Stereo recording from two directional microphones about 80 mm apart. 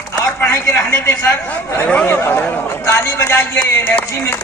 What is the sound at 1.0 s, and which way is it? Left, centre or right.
A man's voice, left.